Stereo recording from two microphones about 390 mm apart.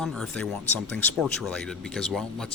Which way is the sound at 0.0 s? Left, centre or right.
Centre.